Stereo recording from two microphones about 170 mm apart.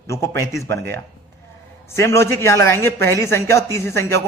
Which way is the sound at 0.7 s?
15° left (ahead or behind).